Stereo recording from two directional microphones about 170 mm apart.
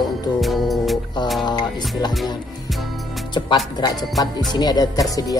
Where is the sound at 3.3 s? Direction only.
25° left (ahead or behind).